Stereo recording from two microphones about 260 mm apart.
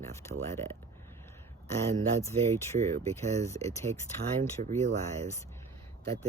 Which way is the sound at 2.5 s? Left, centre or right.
Centre.